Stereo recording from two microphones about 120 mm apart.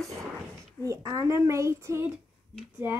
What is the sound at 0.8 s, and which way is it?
A child's voice, 25° right (ahead or behind).